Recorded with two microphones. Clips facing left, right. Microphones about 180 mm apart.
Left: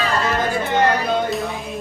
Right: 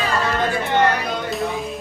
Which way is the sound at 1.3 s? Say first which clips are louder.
Even; centre (ahead or behind).